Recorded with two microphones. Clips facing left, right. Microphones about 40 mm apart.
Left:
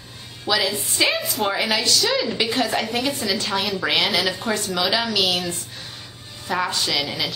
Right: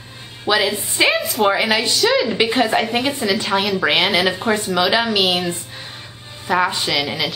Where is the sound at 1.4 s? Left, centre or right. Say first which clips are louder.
Right 6 dB; centre.